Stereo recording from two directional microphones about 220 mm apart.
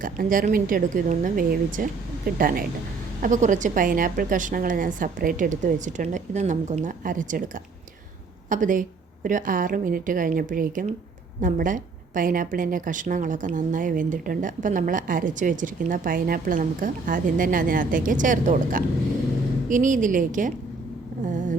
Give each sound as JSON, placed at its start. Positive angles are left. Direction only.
{"t": 0.0, "sound": "a woman's voice", "side_deg": -40}